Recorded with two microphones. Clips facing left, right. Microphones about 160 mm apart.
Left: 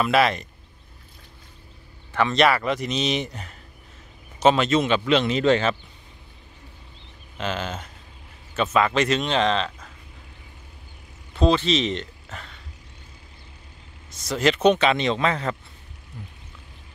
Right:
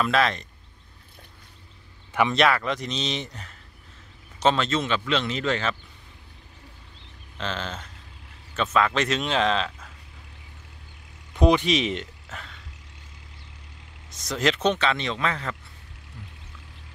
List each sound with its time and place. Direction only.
0.0 s speech: 10° left (ahead or behind)
2.3 s a man's voice: 5° left (ahead or behind); by 5.8 s 20° left (ahead or behind)
7.3 s speech: 10° left (ahead or behind)
11.3 s speech: 15° right (ahead or behind); by 12.5 s centre (ahead or behind)
14.2 s speech: centre (ahead or behind)
14.6 s a man's voice: 15° left (ahead or behind)